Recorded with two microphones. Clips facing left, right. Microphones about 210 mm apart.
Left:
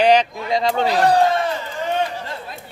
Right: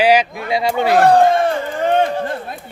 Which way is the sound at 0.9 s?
50° right (ahead or behind).